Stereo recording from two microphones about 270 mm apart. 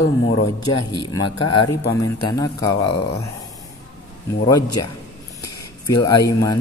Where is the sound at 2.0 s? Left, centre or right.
Centre.